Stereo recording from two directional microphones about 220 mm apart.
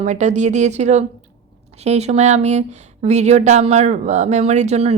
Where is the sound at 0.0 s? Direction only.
30° right (ahead or behind).